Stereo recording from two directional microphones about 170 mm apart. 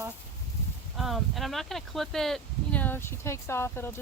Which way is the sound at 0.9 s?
Centre (ahead or behind).